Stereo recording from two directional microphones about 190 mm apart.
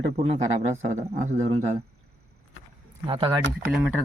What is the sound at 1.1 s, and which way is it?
Speech, 40° right (ahead or behind).